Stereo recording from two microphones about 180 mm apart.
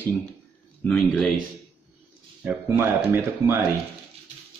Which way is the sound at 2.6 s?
15° right (ahead or behind).